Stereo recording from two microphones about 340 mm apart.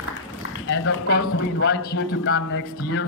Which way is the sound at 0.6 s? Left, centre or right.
Left.